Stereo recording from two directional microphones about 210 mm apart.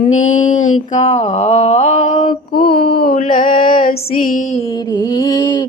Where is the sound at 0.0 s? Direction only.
35° left (ahead or behind).